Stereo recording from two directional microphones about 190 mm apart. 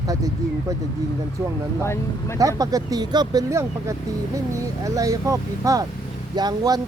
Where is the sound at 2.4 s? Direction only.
20° right (ahead or behind).